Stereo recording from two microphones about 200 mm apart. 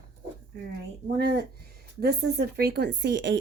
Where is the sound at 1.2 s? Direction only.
50° right (ahead or behind).